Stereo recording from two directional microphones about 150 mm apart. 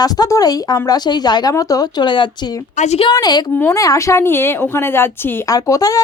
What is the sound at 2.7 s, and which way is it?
Speech, 50° left (ahead or behind).